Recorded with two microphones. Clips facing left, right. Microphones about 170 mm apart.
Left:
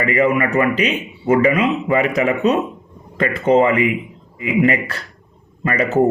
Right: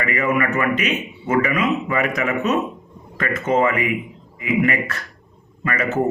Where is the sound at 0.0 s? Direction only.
30° left (ahead or behind).